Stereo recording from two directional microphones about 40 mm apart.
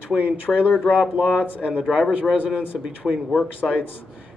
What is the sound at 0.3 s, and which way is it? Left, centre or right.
Speech, centre.